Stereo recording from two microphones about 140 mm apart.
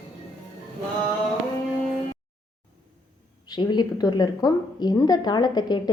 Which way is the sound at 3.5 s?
30° left (ahead or behind).